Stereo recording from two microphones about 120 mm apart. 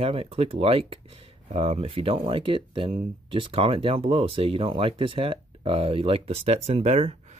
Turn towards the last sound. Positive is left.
turn(degrees=-65)  # may be behind; listen again after turning